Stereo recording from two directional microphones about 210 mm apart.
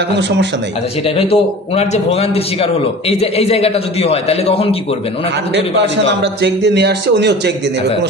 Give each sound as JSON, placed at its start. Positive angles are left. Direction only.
{"t": 1.0, "sound": "a man's voice", "side_deg": 25}
{"t": 6.2, "sound": "speech", "side_deg": -55}